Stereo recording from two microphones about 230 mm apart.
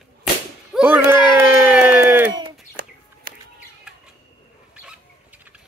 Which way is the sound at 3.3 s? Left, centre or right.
Right.